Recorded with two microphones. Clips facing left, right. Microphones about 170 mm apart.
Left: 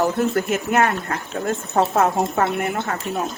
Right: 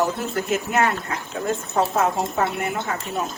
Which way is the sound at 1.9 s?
60° left (ahead or behind).